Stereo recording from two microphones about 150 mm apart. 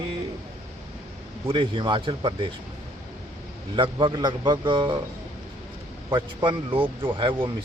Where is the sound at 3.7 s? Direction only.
35° right (ahead or behind).